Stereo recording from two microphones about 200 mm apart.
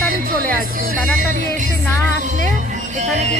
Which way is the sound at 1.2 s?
40° right (ahead or behind).